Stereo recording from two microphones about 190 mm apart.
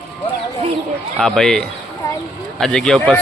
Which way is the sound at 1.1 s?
Centre (ahead or behind).